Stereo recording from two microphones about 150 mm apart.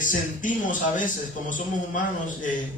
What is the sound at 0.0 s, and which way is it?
Speech, 60° left (ahead or behind).